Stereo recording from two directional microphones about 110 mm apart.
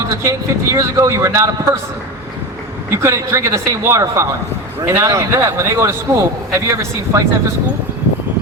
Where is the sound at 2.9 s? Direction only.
25° right (ahead or behind).